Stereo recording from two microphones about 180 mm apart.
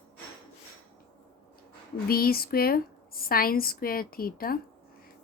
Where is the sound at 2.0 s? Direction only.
55° left (ahead or behind).